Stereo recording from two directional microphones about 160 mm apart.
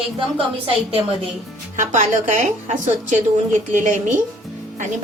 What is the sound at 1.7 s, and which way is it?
A woman's voice, 55° right (ahead or behind).